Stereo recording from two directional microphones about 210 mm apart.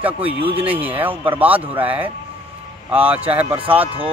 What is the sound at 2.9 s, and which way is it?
Speech, 5° right (ahead or behind).